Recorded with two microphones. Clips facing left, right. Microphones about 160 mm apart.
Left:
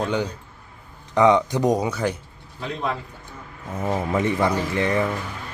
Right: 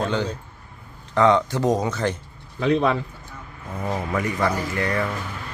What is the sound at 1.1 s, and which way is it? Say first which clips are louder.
Speech: left 1 dB; 15° left (ahead or behind).